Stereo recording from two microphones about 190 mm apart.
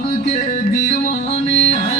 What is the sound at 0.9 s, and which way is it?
Music, 35° left (ahead or behind).